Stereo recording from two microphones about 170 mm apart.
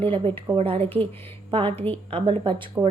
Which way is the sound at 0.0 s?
30° right (ahead or behind).